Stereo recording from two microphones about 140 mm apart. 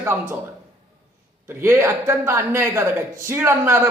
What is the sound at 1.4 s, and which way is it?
A man's voice, 15° right (ahead or behind).